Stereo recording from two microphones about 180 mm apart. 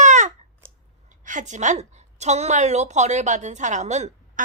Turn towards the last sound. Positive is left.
turn(degrees=-40)  # may be behind; listen again after turning